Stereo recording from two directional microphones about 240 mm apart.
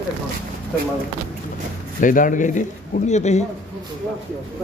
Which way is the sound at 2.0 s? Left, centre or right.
Left.